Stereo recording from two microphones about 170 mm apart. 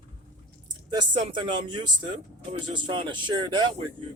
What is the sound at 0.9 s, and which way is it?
Speech, 25° right (ahead or behind).